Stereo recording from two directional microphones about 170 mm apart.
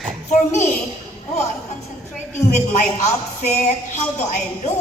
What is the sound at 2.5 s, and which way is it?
A woman's voice, 40° left (ahead or behind).